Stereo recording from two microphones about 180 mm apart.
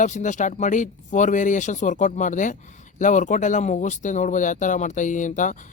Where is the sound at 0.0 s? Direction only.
45° left (ahead or behind).